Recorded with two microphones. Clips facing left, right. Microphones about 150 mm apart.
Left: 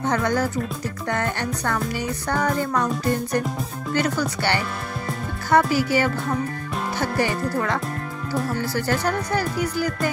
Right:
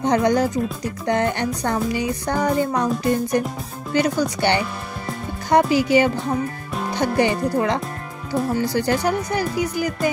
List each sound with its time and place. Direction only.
0.0 s speech: 15° right (ahead or behind)